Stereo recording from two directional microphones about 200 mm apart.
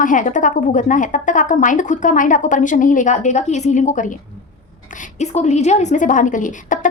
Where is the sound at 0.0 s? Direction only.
40° left (ahead or behind).